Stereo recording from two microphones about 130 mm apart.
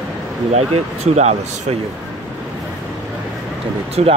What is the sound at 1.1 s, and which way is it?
Speech, 55° right (ahead or behind).